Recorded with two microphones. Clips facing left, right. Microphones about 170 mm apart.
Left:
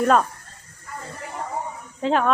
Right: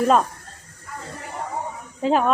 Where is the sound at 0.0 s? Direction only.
Centre (ahead or behind).